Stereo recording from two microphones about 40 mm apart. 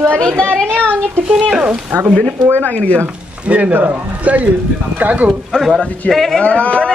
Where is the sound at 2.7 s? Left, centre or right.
Left.